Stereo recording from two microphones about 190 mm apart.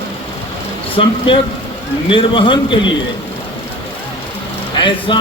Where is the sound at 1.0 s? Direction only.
30° left (ahead or behind).